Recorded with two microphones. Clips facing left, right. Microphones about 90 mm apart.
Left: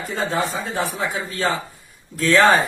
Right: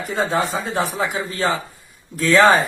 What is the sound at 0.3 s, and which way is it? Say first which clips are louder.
Speech: right 2 dB; 15° right (ahead or behind).